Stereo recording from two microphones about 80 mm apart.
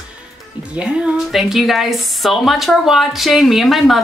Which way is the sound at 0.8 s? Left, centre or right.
Centre.